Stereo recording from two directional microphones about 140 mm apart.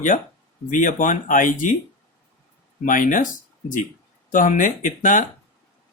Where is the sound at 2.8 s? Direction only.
70° left (ahead or behind).